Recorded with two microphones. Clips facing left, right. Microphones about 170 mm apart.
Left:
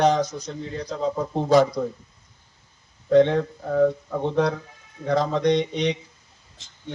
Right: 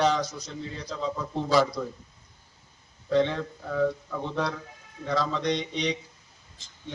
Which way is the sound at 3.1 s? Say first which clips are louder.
Left 7 dB; 50° left (ahead or behind).